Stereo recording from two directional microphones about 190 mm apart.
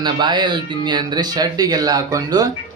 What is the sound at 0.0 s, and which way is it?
A man's voice, 25° right (ahead or behind).